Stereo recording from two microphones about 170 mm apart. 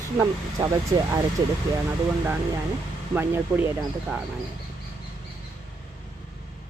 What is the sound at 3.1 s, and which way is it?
Speech, 10° right (ahead or behind).